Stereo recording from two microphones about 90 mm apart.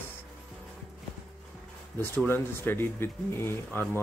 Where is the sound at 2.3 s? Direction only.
25° left (ahead or behind).